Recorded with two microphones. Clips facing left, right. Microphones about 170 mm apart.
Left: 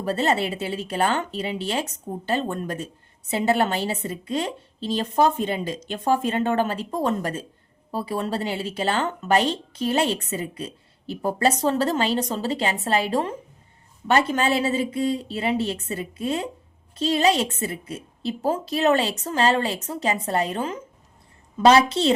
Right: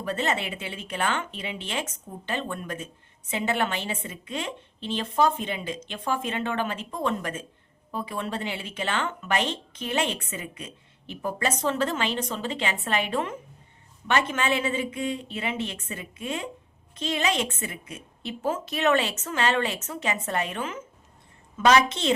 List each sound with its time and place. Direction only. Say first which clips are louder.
0.0 s speech: left 5 dB; 35° left (ahead or behind)